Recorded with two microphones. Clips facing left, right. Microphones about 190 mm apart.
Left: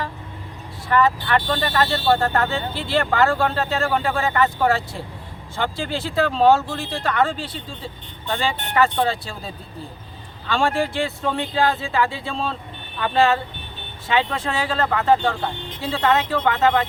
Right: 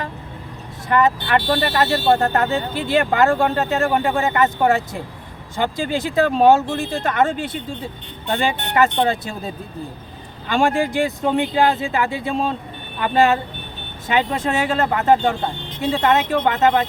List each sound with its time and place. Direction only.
0.9 s speech: 20° right (ahead or behind)
9.0 s speech: 20° right (ahead or behind)
10.5 s speech: 15° right (ahead or behind)